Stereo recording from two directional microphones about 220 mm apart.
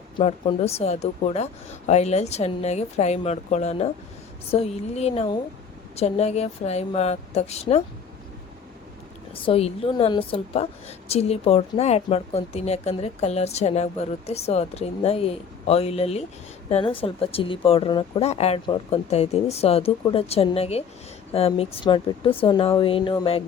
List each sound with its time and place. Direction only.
0.2 s a woman's voice: 30° left (ahead or behind)
9.3 s a woman's voice: 25° left (ahead or behind)